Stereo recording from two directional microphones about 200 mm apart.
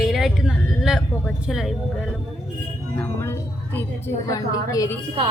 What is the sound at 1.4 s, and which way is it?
Speech, 5° right (ahead or behind).